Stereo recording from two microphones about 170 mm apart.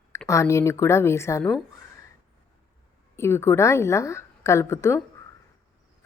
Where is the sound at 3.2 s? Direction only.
15° left (ahead or behind).